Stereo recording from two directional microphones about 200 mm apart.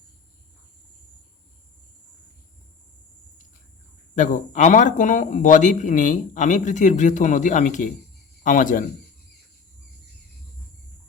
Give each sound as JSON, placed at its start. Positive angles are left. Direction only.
{"t": 4.1, "sound": "speech", "side_deg": 35}